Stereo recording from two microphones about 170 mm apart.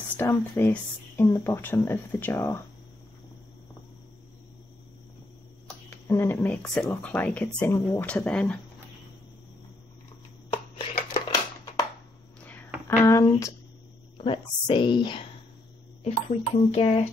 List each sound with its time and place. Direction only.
0.2 s speech: 10° left (ahead or behind)
6.0 s speech: 15° left (ahead or behind)
10.5 s a sound: 35° left (ahead or behind)
13.0 s speech: 20° left (ahead or behind); by 16.9 s 40° left (ahead or behind)